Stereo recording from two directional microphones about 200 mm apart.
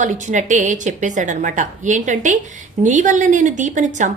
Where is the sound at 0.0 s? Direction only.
40° right (ahead or behind).